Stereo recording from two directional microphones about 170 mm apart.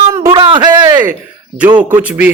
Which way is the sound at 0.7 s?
15° right (ahead or behind).